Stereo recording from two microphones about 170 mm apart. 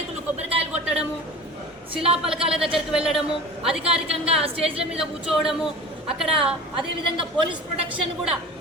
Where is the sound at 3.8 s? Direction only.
35° right (ahead or behind).